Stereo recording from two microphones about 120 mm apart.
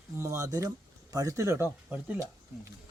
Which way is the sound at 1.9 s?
10° right (ahead or behind).